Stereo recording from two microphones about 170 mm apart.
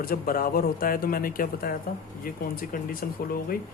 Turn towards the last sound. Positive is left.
turn(degrees=60)  # may be behind; listen again after turning